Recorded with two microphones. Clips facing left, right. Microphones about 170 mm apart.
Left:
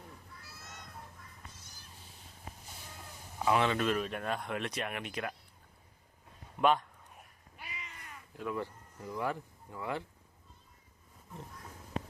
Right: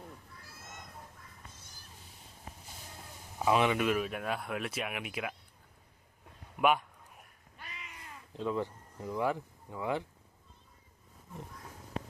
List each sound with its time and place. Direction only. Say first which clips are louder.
3.3 s speech: right 1 dB; 15° right (ahead or behind)
6.6 s a sound: even; 10° right (ahead or behind)
7.6 s cat: left 1 dB; 5° left (ahead or behind)
7.9 s speech: right 4 dB; 25° right (ahead or behind)